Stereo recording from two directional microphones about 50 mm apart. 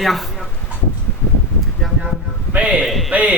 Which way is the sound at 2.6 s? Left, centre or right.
Right.